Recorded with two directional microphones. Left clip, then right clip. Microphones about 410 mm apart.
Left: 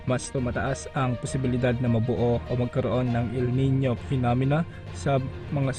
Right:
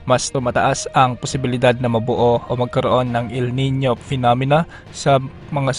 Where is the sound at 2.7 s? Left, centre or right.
Centre.